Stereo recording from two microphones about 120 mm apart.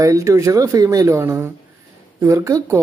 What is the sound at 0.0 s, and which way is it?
Speech, 25° right (ahead or behind).